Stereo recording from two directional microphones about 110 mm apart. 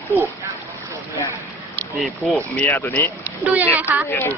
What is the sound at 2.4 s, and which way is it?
Speech, 15° left (ahead or behind).